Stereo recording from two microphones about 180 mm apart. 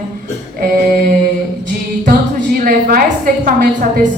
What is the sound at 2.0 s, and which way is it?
A woman's voice, 55° right (ahead or behind).